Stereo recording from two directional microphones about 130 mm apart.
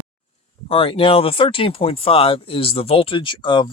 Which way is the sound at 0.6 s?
45° left (ahead or behind).